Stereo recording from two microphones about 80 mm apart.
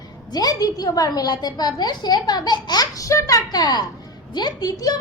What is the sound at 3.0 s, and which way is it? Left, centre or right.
A woman's voice, left.